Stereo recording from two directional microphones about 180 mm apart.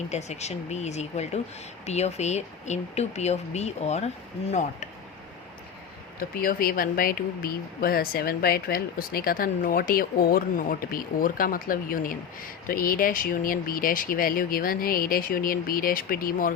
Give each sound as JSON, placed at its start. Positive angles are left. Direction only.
{"t": 0.1, "sound": "speech", "side_deg": 40}
{"t": 6.1, "sound": "speech", "side_deg": 55}